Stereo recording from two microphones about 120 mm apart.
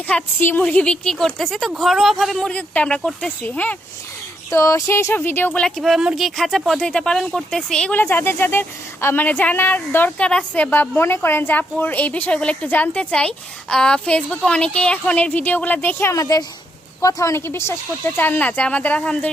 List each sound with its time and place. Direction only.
0.1 s a woman's voice: 10° left (ahead or behind)
4.5 s a woman's voice: 25° left (ahead or behind); by 7.9 s 5° left (ahead or behind)
8.0 s a woman's voice: 20° left (ahead or behind)
16.1 s a woman's voice: 30° left (ahead or behind); by 19.3 s 10° left (ahead or behind)